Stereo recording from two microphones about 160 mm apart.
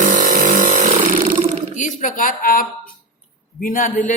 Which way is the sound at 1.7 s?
50° left (ahead or behind).